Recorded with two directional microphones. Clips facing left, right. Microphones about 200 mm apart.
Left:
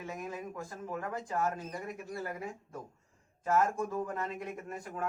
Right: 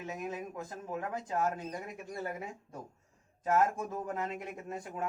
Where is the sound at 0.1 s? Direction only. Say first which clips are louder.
Right 2 dB; 20° right (ahead or behind).